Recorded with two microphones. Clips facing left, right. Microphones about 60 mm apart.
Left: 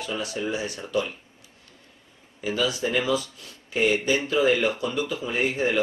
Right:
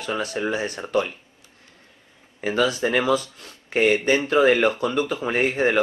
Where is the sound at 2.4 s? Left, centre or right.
Right.